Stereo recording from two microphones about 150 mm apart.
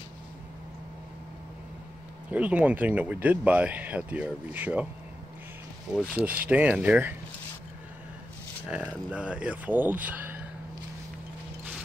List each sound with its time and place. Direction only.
2.3 s speech: 10° right (ahead or behind)
5.9 s speech: 10° right (ahead or behind)
8.6 s speech: 10° right (ahead or behind)